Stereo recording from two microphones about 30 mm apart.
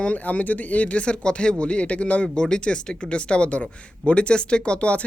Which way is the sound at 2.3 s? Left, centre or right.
Left.